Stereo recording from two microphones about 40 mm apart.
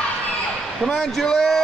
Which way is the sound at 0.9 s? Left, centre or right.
Centre.